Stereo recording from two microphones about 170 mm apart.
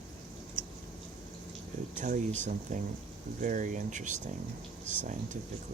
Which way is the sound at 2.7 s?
45° right (ahead or behind).